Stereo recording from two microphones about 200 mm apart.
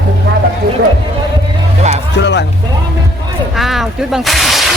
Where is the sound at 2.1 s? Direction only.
60° left (ahead or behind).